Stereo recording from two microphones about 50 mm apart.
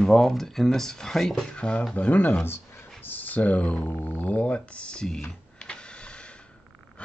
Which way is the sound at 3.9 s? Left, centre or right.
Left.